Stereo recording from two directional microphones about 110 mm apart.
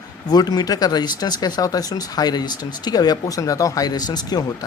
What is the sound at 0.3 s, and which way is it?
Speech, 40° left (ahead or behind).